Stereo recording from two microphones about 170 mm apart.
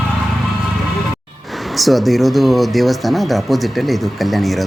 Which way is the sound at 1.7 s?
Centre (ahead or behind).